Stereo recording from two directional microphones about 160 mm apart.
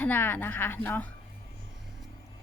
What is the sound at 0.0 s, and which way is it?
A woman's voice, 10° left (ahead or behind).